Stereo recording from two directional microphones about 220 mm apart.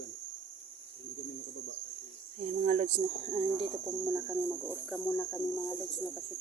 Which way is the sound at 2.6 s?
35° right (ahead or behind).